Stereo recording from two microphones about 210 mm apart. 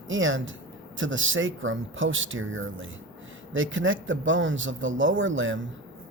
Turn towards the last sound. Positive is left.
turn(degrees=-65)  # may be behind; listen again after turning